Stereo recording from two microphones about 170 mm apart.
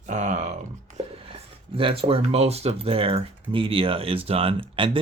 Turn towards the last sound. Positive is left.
turn(degrees=-30)  # may be behind; listen again after turning